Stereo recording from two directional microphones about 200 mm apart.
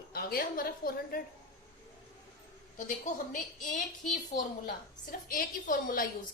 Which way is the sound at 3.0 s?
40° left (ahead or behind).